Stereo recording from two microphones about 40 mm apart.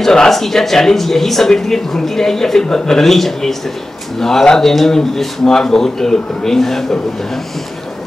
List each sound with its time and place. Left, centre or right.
0.0 s speech: centre